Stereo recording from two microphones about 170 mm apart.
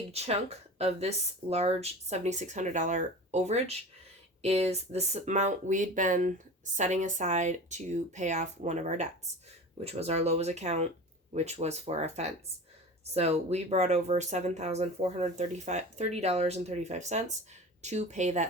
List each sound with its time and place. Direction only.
0.1 s speech: 40° right (ahead or behind)